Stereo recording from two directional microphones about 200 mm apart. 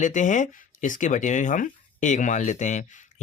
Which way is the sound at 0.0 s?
40° left (ahead or behind).